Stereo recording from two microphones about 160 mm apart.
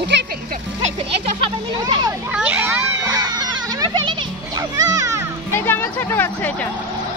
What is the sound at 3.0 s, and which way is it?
Baby cry, 25° right (ahead or behind).